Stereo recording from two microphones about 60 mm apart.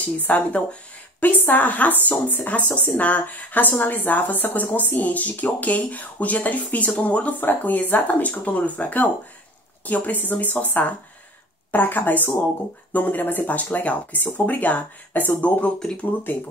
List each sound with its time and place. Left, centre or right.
0.0 s speech: left
15.8 s speech: centre